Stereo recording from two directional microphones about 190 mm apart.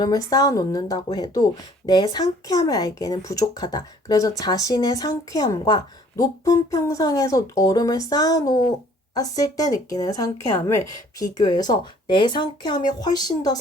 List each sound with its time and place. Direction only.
0.0 s speech: 20° left (ahead or behind)